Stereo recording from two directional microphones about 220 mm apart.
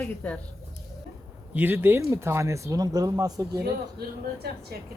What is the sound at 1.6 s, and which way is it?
Speech, 10° right (ahead or behind).